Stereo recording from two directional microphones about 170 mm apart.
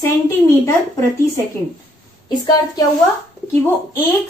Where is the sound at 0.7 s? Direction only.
15° left (ahead or behind).